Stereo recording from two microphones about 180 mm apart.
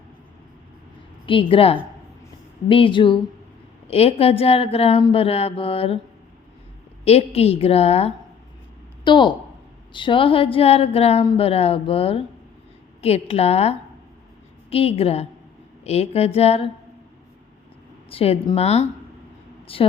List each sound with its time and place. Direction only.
1.3 s a woman's voice: 30° left (ahead or behind)
7.0 s a woman's voice: 35° left (ahead or behind)
18.1 s a woman's voice: 30° left (ahead or behind)